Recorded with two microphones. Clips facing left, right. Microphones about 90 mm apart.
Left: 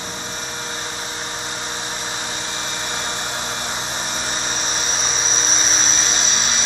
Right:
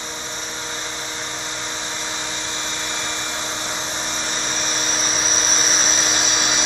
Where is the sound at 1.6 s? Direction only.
10° left (ahead or behind).